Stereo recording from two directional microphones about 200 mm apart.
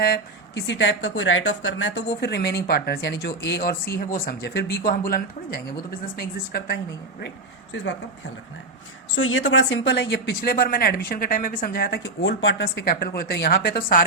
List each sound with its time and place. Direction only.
0.0 s speech: 55° left (ahead or behind); by 2.0 s 70° left (ahead or behind)
2.2 s speech: 55° left (ahead or behind)
9.1 s speech: 80° left; by 12.0 s 50° left (ahead or behind)
12.0 s speech: 65° left (ahead or behind)